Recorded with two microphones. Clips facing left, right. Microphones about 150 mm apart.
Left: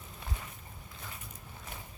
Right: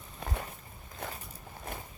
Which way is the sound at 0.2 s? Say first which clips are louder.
Right 7 dB; 50° right (ahead or behind).